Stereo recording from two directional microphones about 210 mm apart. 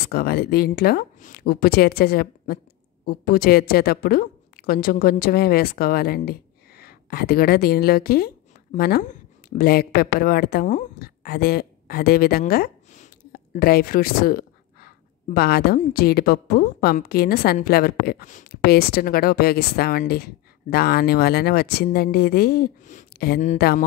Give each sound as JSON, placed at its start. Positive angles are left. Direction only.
{"t": 0.1, "sound": "a woman's voice", "side_deg": 45}